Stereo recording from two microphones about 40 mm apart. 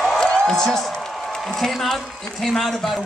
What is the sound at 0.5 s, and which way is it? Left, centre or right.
Speech, centre.